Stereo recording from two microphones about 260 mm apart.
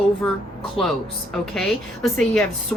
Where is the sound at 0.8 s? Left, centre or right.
Centre.